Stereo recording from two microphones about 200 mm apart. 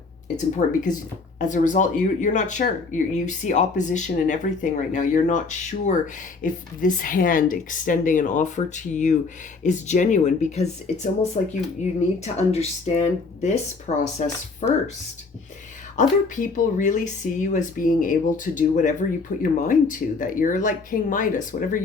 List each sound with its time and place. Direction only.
0.3 s speech: 40° left (ahead or behind)
16.0 s speech: 40° left (ahead or behind)